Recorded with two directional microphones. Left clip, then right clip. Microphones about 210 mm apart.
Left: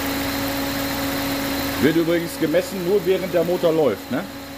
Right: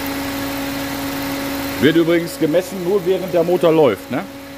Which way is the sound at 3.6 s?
50° right (ahead or behind).